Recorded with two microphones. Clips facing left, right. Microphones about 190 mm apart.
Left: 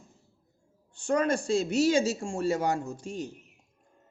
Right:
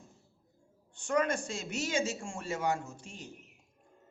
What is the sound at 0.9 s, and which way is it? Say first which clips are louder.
Speech: left 4 dB; 30° left (ahead or behind).